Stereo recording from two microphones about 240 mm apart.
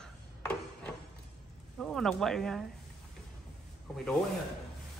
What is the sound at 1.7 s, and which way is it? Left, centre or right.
Speech, centre.